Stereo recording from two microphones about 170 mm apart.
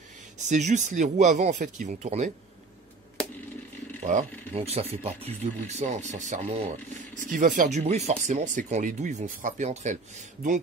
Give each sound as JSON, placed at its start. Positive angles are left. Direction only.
{"t": 0.4, "sound": "speech", "side_deg": -45}
{"t": 4.0, "sound": "speech", "side_deg": -45}